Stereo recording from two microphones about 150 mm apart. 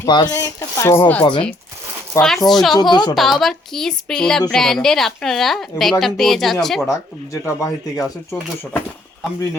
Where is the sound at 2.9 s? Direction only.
25° left (ahead or behind).